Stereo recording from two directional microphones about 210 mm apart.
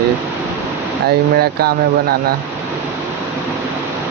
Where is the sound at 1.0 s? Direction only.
45° right (ahead or behind).